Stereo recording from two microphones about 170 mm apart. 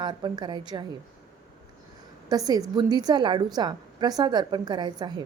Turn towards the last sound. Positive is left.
turn(degrees=-25)  # may be behind; listen again after turning